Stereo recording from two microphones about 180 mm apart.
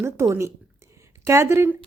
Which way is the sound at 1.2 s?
15° right (ahead or behind).